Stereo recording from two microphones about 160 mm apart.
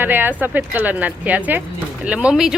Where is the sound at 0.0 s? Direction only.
10° right (ahead or behind).